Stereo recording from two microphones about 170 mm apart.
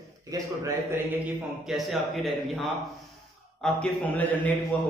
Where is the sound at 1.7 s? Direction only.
Centre (ahead or behind).